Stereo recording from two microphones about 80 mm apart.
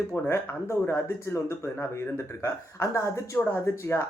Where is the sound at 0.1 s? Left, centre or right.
Left.